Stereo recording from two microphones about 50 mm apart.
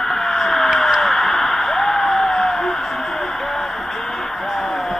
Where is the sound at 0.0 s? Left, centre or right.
Centre.